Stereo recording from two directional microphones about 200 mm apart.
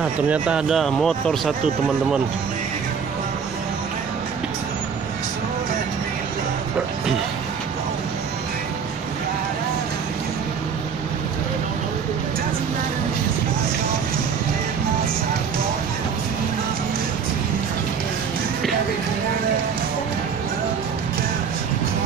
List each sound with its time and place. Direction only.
0.3 s speech: 5° right (ahead or behind)